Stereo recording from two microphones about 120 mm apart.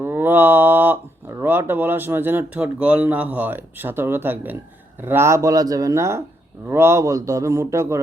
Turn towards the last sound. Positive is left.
turn(degrees=-25)  # may be behind; listen again after turning